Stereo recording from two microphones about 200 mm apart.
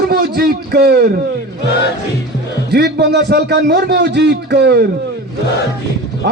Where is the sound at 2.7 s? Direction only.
55° right (ahead or behind).